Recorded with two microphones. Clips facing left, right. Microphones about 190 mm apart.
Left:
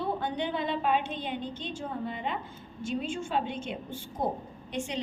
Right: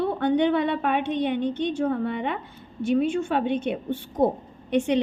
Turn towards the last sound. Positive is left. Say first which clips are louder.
# right 12 dB
turn(degrees=-65)  # may be behind; listen again after turning